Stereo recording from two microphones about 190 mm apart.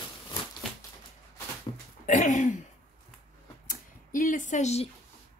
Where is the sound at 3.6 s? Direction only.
45° left (ahead or behind).